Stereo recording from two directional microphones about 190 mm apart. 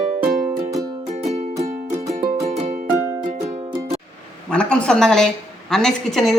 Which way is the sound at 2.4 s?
35° right (ahead or behind).